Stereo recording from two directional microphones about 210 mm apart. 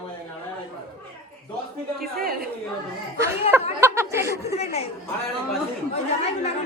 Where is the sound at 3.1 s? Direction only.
15° right (ahead or behind).